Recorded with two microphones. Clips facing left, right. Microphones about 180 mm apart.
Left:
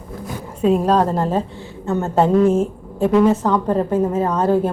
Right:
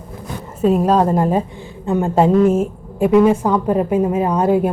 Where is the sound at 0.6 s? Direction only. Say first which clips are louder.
Right 1 dB; 5° right (ahead or behind).